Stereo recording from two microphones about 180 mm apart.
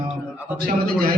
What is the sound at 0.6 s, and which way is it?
Speech, 55° right (ahead or behind).